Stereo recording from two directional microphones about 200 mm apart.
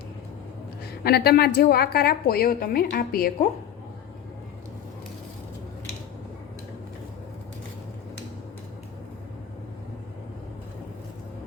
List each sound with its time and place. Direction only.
1.0 s a woman's voice: 50° left (ahead or behind)